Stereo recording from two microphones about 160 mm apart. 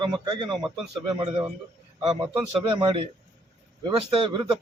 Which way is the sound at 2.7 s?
30° right (ahead or behind).